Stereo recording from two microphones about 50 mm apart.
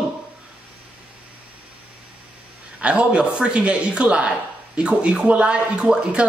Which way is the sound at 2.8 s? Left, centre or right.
Right.